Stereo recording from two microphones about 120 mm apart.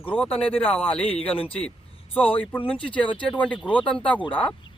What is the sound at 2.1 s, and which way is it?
Speech, 15° left (ahead or behind).